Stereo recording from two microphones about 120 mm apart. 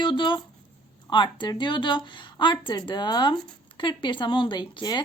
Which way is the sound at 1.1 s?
40° left (ahead or behind).